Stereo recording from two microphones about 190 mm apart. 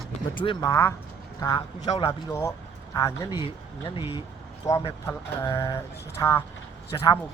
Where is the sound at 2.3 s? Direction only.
15° left (ahead or behind).